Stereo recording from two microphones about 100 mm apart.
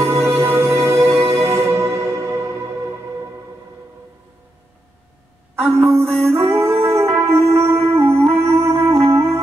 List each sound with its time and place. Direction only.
0.0 s music: 25° right (ahead or behind)
5.6 s a sound: 25° right (ahead or behind)
6.5 s music: 25° right (ahead or behind)